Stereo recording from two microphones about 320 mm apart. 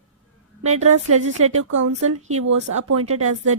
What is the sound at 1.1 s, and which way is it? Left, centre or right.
Speech, right.